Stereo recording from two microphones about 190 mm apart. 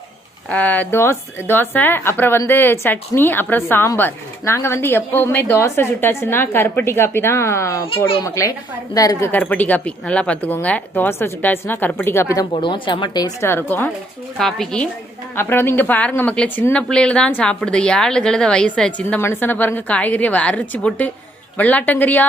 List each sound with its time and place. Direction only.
0.5 s a woman's voice: 10° left (ahead or behind)
7.9 s a child's voice: 30° left (ahead or behind)
9.0 s a woman's voice: 15° left (ahead or behind)